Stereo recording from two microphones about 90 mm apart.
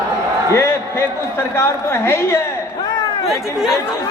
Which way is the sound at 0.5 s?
25° left (ahead or behind).